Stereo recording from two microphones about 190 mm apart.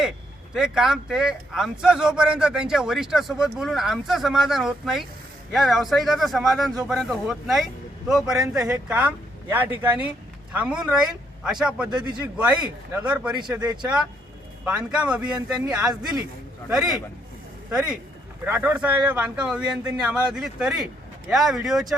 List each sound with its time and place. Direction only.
0.5 s speech: 5° right (ahead or behind)
11.9 s a man's voice: 25° right (ahead or behind)
12.4 s speech: 5° right (ahead or behind)
15.4 s a man's voice: 20° right (ahead or behind)
16.6 s speech: 5° right (ahead or behind)
18.4 s speech: 10° right (ahead or behind)